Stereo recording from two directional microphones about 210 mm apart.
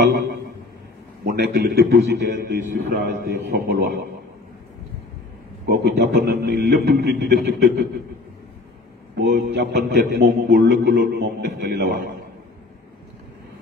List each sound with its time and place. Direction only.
1.2 s a man's voice: 50° right (ahead or behind)
5.7 s a man's voice: 50° right (ahead or behind)
9.1 s a man's voice: 50° right (ahead or behind)